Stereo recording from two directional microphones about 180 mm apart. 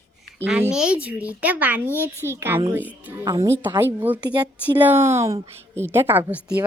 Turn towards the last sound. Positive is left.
turn(degrees=-10)  # may be behind; listen again after turning